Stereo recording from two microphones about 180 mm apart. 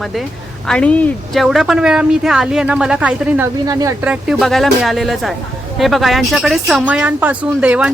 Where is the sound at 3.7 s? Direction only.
20° right (ahead or behind).